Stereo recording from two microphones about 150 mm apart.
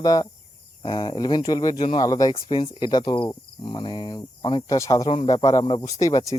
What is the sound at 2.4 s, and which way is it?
Speech, 35° left (ahead or behind).